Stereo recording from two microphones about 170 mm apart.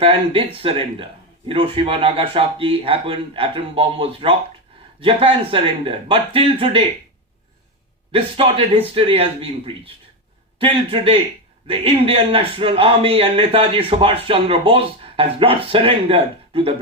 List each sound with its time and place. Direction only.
0.0 s a man's voice: 35° right (ahead or behind)
8.1 s a man's voice: 35° right (ahead or behind)